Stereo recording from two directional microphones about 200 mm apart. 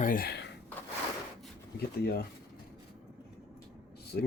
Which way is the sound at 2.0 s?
55° left (ahead or behind).